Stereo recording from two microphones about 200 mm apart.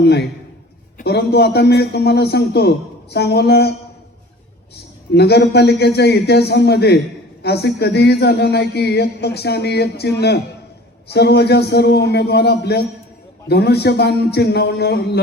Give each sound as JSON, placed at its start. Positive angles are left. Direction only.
{"t": 0.0, "sound": "speech", "side_deg": 55}
{"t": 5.1, "sound": "speech", "side_deg": 55}